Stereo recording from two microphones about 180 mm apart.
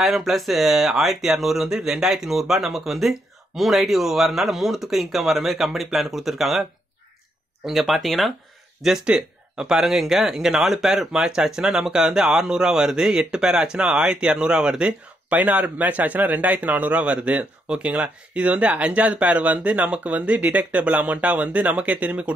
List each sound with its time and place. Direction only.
0.0 s speech: centre (ahead or behind)
7.6 s speech: centre (ahead or behind)